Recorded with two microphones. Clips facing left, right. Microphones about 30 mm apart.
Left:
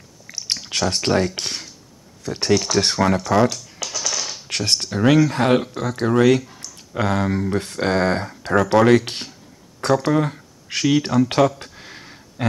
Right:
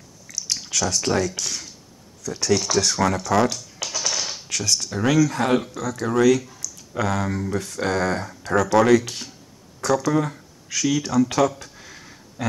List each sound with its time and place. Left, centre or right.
0.3 s a sound: left
0.7 s speech: left
3.0 s speech: left
3.3 s speech: centre
3.8 s music: centre
4.5 s speech: left
11.6 s a sound: left